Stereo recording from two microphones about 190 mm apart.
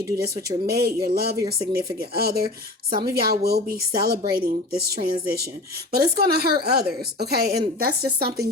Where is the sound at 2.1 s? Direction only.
55° right (ahead or behind).